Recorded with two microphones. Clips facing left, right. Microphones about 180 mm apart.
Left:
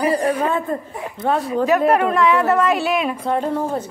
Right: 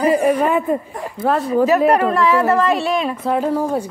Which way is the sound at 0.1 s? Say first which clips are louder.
Right 4 dB; 15° right (ahead or behind).